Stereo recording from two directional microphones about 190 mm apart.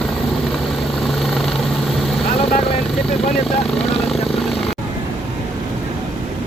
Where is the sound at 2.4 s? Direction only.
30° left (ahead or behind).